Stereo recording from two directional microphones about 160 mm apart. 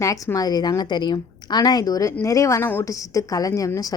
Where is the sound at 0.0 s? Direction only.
20° left (ahead or behind).